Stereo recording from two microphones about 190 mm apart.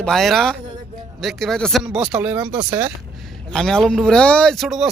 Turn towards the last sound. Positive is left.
turn(degrees=0)  # may be behind; listen again after turning